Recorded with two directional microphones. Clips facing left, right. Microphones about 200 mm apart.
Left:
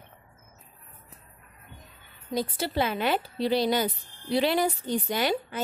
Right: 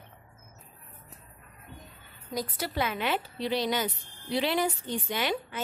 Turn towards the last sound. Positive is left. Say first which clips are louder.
# left 4 dB
turn(degrees=40)  # may be behind; listen again after turning